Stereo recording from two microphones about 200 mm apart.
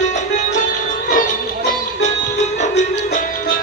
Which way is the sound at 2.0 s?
35° left (ahead or behind).